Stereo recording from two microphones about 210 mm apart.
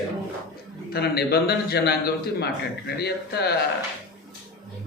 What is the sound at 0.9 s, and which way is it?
Speech, 50° left (ahead or behind).